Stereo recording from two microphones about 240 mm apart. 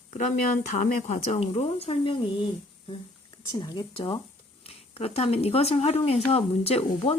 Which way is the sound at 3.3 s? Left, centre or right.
Centre.